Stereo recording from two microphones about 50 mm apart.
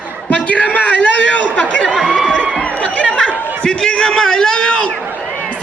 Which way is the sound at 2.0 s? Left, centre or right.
Centre.